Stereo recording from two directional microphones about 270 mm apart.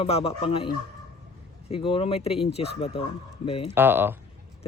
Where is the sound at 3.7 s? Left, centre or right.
Centre.